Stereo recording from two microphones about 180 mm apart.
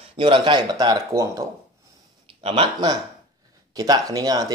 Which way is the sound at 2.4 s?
30° right (ahead or behind).